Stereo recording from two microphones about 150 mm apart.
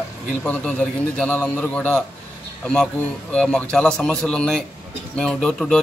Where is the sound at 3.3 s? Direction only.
5° left (ahead or behind).